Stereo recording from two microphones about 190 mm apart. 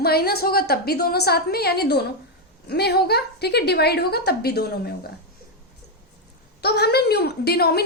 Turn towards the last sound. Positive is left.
turn(degrees=55)  # may be behind; listen again after turning